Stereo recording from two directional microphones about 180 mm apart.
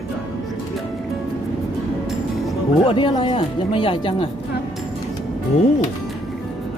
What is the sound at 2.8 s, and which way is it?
Speech, 30° left (ahead or behind).